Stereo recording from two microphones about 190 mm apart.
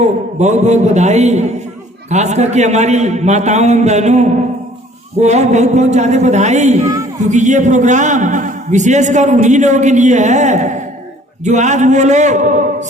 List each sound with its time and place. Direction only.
0.0 s a man's voice: 35° right (ahead or behind)